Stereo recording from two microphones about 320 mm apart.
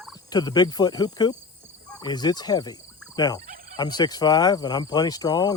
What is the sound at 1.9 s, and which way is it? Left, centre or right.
Fowl, centre.